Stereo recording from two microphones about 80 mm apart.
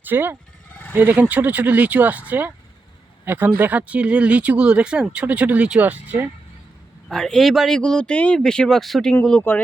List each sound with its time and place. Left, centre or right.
0.0 s speech: right
7.1 s speech: centre
9.5 s speech: left